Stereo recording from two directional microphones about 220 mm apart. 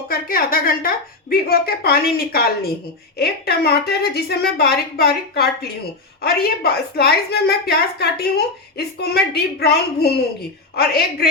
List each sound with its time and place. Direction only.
0.1 s a woman's voice: 40° left (ahead or behind)